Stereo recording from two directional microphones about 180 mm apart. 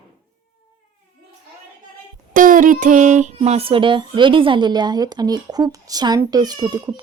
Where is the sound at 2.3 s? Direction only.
50° right (ahead or behind); by 7.0 s 20° right (ahead or behind).